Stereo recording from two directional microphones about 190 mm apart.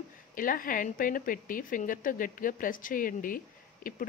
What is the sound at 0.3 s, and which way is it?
A woman's voice, 45° left (ahead or behind).